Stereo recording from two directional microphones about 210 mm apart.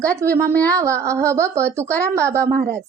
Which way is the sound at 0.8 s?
15° right (ahead or behind).